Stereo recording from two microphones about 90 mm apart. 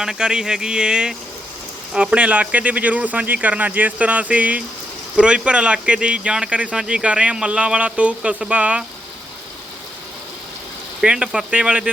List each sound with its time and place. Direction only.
0.0 s speech: 10° right (ahead or behind)
11.0 s speech: 10° right (ahead or behind)